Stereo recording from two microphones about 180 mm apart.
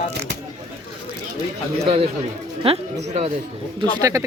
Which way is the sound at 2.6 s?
35° right (ahead or behind).